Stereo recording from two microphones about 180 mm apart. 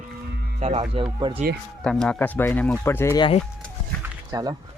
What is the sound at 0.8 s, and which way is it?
Speech, 25° right (ahead or behind).